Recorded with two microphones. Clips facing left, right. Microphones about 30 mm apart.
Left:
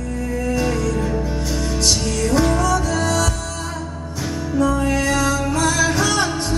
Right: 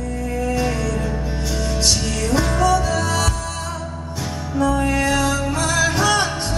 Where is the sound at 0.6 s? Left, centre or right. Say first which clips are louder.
Left 1 dB; centre.